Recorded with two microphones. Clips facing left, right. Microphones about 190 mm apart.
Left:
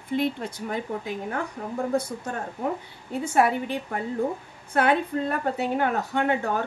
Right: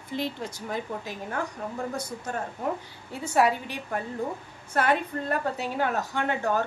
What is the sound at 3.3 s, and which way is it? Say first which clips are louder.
A woman's voice: left 1 dB; 55° left (ahead or behind).